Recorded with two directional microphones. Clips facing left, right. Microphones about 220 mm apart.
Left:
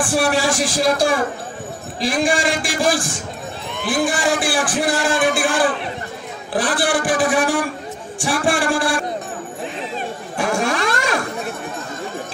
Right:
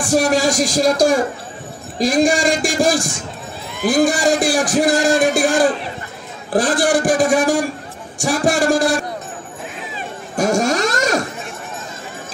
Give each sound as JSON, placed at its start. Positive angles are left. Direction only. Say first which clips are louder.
{"t": 0.0, "sound": "speech", "louder": "right 3 dB", "side_deg": -40}
{"t": 10.3, "sound": "vehicle", "louder": "right 4 dB", "side_deg": -45}